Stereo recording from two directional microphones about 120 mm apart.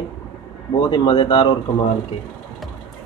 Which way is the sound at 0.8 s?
40° left (ahead or behind).